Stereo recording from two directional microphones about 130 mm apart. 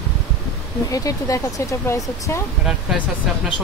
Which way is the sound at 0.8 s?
25° left (ahead or behind).